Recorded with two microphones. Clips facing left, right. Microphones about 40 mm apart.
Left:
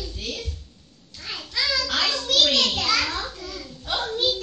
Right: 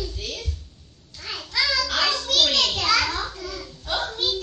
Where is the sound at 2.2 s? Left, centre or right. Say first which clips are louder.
Left 4 dB; left.